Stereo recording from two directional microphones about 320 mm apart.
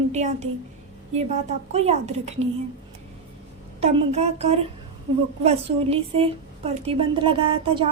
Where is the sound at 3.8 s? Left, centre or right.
Centre.